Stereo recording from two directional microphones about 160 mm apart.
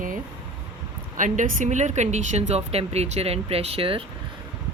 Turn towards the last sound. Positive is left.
turn(degrees=-35)  # may be behind; listen again after turning